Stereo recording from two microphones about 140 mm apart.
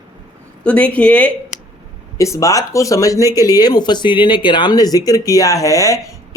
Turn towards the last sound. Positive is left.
turn(degrees=20)  # may be behind; listen again after turning